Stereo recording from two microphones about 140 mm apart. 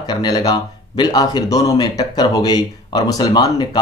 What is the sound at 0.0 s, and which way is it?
A man's voice, 30° left (ahead or behind).